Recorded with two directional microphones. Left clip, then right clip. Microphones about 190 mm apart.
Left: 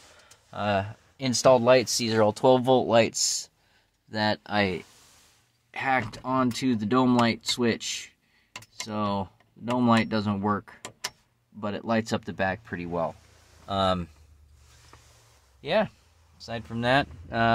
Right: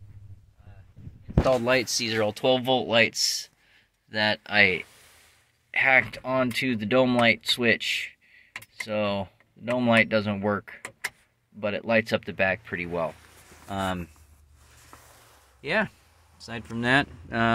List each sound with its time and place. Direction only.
1.5 s speech: 30° left (ahead or behind); by 10.4 s 5° left (ahead or behind)
11.6 s speech: 5° left (ahead or behind)
15.6 s speech: 5° left (ahead or behind)